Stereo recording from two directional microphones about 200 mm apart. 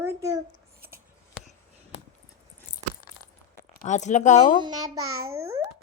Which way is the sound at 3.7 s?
35° left (ahead or behind).